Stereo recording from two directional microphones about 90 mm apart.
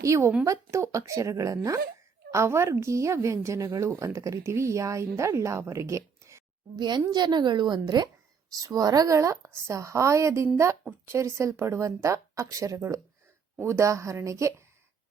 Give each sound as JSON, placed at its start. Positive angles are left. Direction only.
{"t": 0.0, "sound": "a woman's voice", "side_deg": -30}
{"t": 6.7, "sound": "a woman's voice", "side_deg": -55}